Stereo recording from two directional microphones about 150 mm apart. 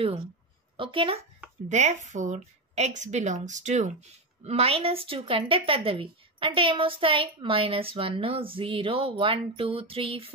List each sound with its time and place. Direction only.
0.7 s a woman's voice: 35° right (ahead or behind)
1.7 s a woman's voice: 50° right (ahead or behind)